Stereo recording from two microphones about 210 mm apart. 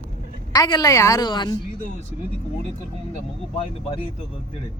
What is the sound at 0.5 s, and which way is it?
A woman's voice, 20° left (ahead or behind).